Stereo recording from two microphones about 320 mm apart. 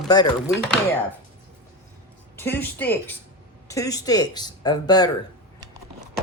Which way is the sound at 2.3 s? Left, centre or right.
Centre.